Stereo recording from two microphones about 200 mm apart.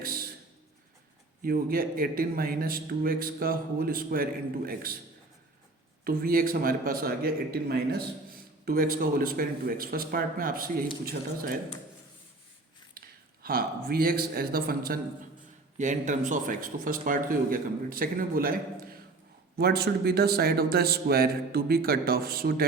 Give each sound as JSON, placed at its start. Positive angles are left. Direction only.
{"t": 0.0, "sound": "a sound", "side_deg": -45}
{"t": 1.4, "sound": "a man's voice", "side_deg": -45}
{"t": 6.1, "sound": "a man's voice", "side_deg": -45}
{"t": 13.4, "sound": "a man's voice", "side_deg": -45}